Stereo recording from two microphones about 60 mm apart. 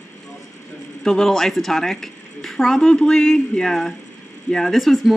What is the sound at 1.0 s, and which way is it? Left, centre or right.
A woman's voice, centre.